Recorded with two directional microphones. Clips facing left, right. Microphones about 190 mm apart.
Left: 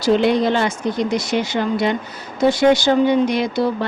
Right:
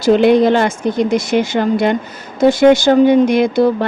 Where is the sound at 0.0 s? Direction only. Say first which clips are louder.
Right 6 dB; 55° right (ahead or behind).